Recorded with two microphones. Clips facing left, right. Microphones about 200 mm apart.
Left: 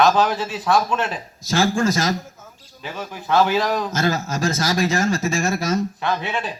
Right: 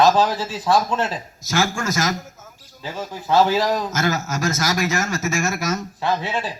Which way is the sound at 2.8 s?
25° right (ahead or behind).